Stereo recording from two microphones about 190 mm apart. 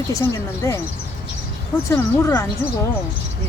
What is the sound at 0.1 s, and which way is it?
Speech, 15° left (ahead or behind).